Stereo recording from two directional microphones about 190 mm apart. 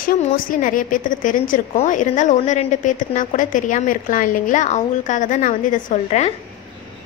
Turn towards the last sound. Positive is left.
turn(degrees=35)  # may be behind; listen again after turning